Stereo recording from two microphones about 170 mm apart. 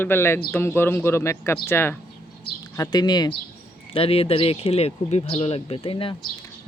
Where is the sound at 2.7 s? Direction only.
25° left (ahead or behind).